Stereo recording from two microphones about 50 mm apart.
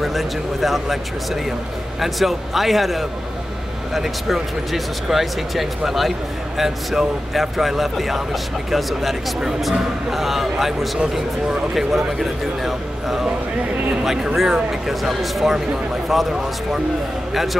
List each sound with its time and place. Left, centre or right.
0.0 s speech: centre